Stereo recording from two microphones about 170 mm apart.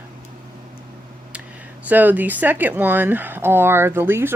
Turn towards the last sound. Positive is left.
turn(degrees=-15)  # may be behind; listen again after turning